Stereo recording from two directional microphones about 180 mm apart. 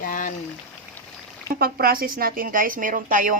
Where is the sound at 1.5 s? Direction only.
55° right (ahead or behind).